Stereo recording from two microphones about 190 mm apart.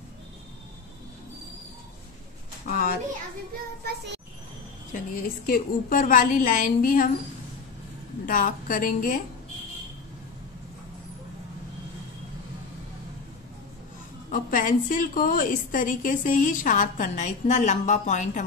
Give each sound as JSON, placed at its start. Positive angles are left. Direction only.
{"t": 2.6, "sound": "a woman's voice", "side_deg": 50}
{"t": 4.9, "sound": "a woman's voice", "side_deg": 45}
{"t": 8.3, "sound": "a woman's voice", "side_deg": 45}
{"t": 14.3, "sound": "a woman's voice", "side_deg": 45}